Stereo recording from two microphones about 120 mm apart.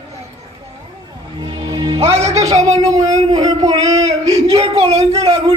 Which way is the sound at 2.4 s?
30° right (ahead or behind).